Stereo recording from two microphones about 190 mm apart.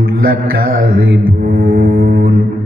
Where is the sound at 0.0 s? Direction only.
50° right (ahead or behind).